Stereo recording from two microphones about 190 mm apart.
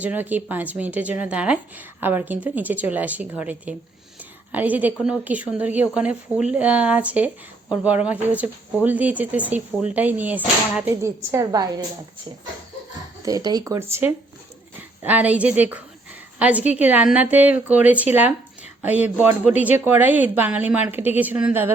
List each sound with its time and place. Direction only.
0.0 s a woman's voice: 10° right (ahead or behind)
13.2 s a woman's voice: 20° right (ahead or behind)